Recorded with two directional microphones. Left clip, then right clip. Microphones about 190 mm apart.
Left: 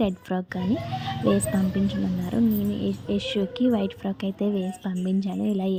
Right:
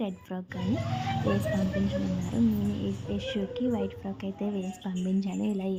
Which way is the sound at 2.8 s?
25° left (ahead or behind).